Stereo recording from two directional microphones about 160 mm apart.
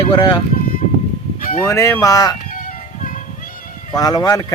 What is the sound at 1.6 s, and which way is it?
Speech, 20° left (ahead or behind).